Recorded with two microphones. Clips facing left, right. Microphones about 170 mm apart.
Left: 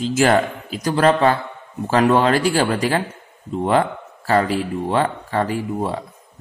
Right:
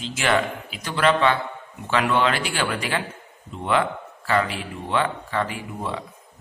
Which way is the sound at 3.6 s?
40° left (ahead or behind).